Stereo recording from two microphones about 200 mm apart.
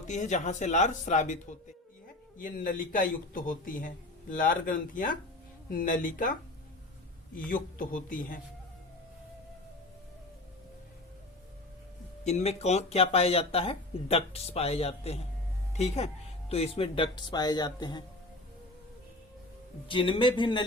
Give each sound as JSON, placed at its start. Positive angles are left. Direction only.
{"t": 0.1, "sound": "a man's voice", "side_deg": 35}
{"t": 7.3, "sound": "a man's voice", "side_deg": 45}
{"t": 12.2, "sound": "speech", "side_deg": 35}
{"t": 19.9, "sound": "speech", "side_deg": 25}